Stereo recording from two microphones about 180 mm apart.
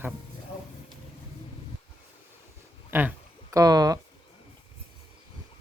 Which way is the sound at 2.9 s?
10° right (ahead or behind).